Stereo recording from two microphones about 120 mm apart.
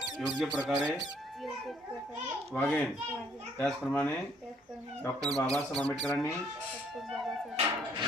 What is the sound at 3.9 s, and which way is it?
Speech, 10° left (ahead or behind).